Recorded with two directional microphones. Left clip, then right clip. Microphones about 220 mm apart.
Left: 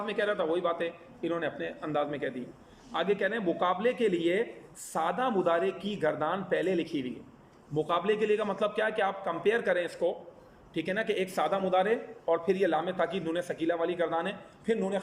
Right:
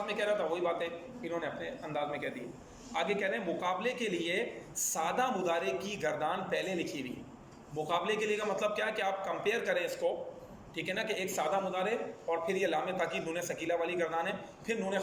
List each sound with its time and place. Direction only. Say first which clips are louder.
0.1 s a man's voice: left 4 dB; 30° left (ahead or behind)